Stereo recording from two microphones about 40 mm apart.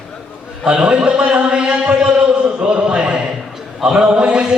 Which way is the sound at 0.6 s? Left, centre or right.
Right.